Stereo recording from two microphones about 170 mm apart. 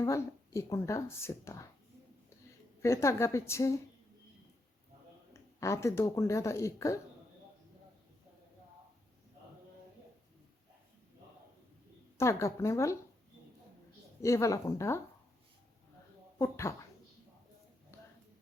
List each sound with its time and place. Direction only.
0.0 s speech: 15° left (ahead or behind)
2.8 s speech: 15° left (ahead or behind)
5.3 s speech: 15° left (ahead or behind)
12.1 s speech: 15° left (ahead or behind)
14.2 s speech: 20° left (ahead or behind)
16.4 s speech: 15° left (ahead or behind)
17.9 s music: 15° left (ahead or behind)